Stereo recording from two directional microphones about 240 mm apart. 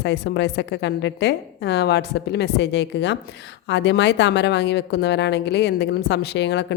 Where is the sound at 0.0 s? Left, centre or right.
Left.